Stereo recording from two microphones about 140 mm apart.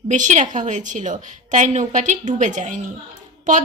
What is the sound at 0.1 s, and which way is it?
A woman's voice, 60° right (ahead or behind).